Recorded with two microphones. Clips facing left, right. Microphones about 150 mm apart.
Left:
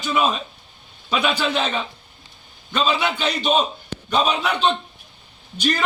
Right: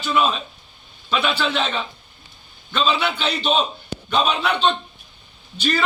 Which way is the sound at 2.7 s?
10° left (ahead or behind).